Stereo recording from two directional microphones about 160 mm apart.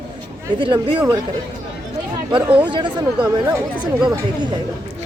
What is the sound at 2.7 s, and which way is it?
Speech, 30° right (ahead or behind).